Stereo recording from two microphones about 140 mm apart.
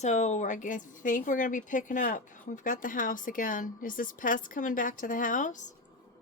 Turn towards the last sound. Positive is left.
turn(degrees=65)  # may be behind; listen again after turning